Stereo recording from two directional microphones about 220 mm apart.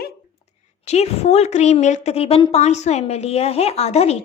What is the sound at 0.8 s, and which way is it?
A woman's voice, 30° left (ahead or behind).